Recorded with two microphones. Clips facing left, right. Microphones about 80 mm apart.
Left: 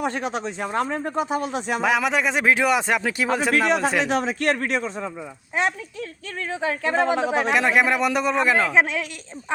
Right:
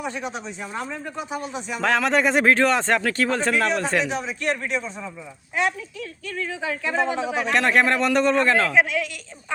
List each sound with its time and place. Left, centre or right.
0.0 s speech: left
1.8 s speech: centre
4.0 s speech: left
6.2 s speech: left
7.5 s speech: centre
8.7 s speech: left